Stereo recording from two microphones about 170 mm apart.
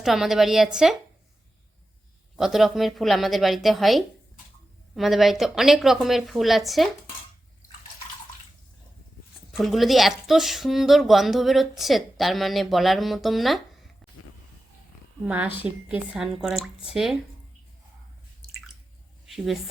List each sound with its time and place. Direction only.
0.0 s a woman's voice: centre (ahead or behind)
2.3 s a woman's voice: 5° right (ahead or behind)
9.5 s a woman's voice: centre (ahead or behind)
15.3 s a woman's voice: 10° right (ahead or behind)
19.2 s a woman's voice: centre (ahead or behind)